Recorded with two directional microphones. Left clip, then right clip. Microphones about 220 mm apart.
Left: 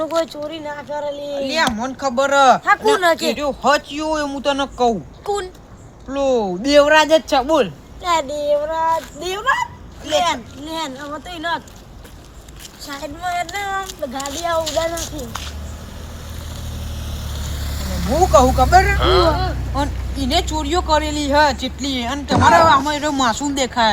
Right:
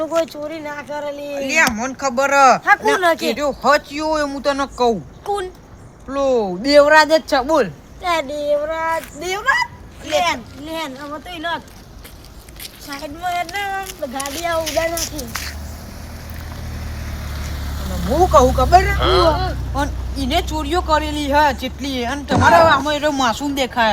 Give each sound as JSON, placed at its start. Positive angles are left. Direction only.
{"t": 0.0, "sound": "speech", "side_deg": 20}
{"t": 1.6, "sound": "speech", "side_deg": -10}
{"t": 2.6, "sound": "speech", "side_deg": 20}
{"t": 3.4, "sound": "speech", "side_deg": -15}
{"t": 5.2, "sound": "a child's voice", "side_deg": 20}
{"t": 6.1, "sound": "speech", "side_deg": -5}
{"t": 8.0, "sound": "speech", "side_deg": 15}
{"t": 12.9, "sound": "speech", "side_deg": 10}
{"t": 18.3, "sound": "speech", "side_deg": -10}
{"t": 18.9, "sound": "speech", "side_deg": 0}